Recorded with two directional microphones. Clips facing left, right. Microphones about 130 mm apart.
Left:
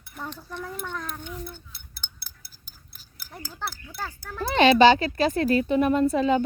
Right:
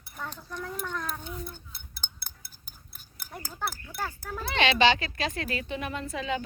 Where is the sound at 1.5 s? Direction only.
45° right (ahead or behind).